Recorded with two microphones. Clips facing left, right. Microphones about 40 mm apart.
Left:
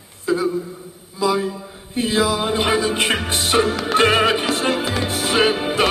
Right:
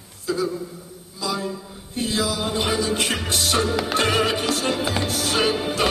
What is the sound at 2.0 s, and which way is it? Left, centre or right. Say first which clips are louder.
Music: left 5 dB; left.